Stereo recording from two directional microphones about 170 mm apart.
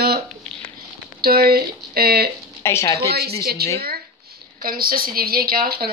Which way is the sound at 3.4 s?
65° right (ahead or behind).